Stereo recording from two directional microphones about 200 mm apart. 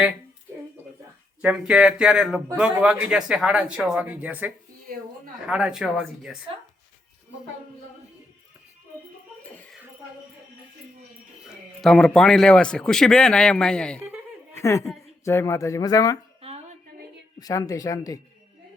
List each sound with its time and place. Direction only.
1.4 s speech: 5° right (ahead or behind)
4.9 s a sound: 45° right (ahead or behind)
5.5 s speech: 5° right (ahead or behind)
11.4 s speech: centre (ahead or behind); by 16.1 s 20° left (ahead or behind)
16.4 s a sound: 30° right (ahead or behind)
17.4 s speech: 15° left (ahead or behind)